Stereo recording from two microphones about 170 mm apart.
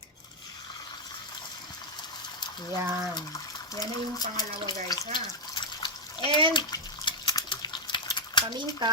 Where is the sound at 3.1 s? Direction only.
25° left (ahead or behind).